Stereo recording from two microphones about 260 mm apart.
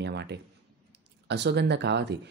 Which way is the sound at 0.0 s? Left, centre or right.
Right.